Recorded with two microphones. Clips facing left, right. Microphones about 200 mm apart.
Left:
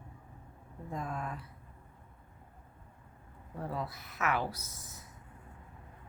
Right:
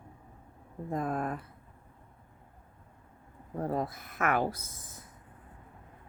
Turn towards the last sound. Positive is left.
turn(degrees=-50)  # may be behind; listen again after turning